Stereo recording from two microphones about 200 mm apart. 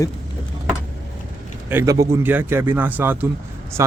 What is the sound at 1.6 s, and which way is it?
Speech, 15° right (ahead or behind).